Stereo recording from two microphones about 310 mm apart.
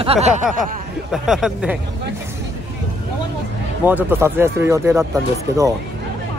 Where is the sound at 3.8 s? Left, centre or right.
Centre.